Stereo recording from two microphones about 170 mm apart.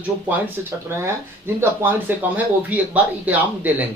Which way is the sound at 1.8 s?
10° right (ahead or behind).